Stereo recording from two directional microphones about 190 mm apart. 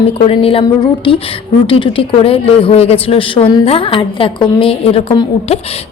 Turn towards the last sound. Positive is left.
turn(degrees=30)  # may be behind; listen again after turning